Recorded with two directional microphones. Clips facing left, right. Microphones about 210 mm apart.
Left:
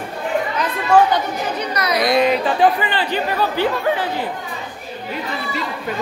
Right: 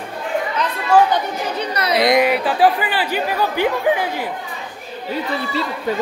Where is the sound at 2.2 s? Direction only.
5° right (ahead or behind).